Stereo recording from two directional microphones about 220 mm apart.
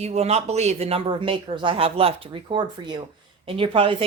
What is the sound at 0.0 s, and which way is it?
Speech, 30° right (ahead or behind).